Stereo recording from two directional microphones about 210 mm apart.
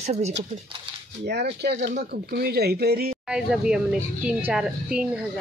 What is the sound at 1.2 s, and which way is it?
Speech, 50° right (ahead or behind).